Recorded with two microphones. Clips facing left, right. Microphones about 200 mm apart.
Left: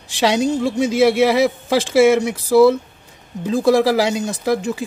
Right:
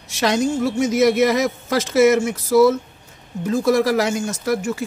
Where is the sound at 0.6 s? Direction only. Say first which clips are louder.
Left 1 dB; 10° left (ahead or behind).